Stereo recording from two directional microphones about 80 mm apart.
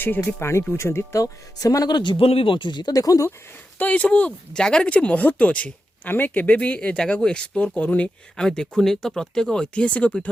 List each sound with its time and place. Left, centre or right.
0.2 s speech: left
2.9 s speech: left
3.8 s speech: centre